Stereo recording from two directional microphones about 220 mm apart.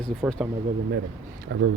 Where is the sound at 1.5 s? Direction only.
55° right (ahead or behind).